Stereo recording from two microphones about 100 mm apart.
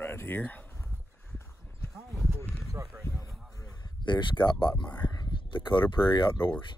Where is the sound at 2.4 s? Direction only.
20° left (ahead or behind).